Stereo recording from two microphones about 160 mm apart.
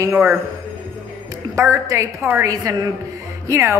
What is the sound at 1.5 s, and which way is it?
A woman's voice, 20° right (ahead or behind).